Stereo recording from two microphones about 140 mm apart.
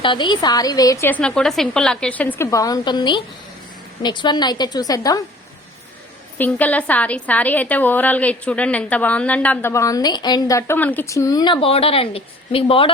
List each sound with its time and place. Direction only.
0.0 s a woman's voice: 35° left (ahead or behind)
1.1 s a woman's voice: 5° left (ahead or behind)
2.5 s a woman's voice: 25° left (ahead or behind)
6.4 s a woman's voice: 10° left (ahead or behind); by 12.9 s 40° left (ahead or behind)